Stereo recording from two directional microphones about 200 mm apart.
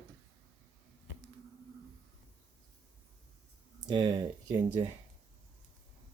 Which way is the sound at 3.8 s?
20° right (ahead or behind).